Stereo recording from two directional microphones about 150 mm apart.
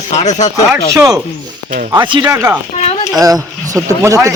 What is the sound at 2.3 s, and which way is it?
Speech, 20° right (ahead or behind).